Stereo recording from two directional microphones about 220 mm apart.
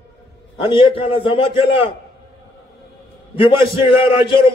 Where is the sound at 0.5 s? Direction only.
25° left (ahead or behind).